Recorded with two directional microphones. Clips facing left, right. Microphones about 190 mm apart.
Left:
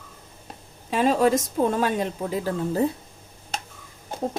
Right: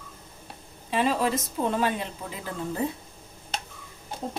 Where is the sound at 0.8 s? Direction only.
45° left (ahead or behind).